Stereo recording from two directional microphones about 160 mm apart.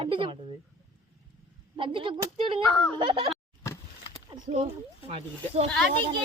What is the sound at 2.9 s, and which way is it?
Speech, 35° right (ahead or behind).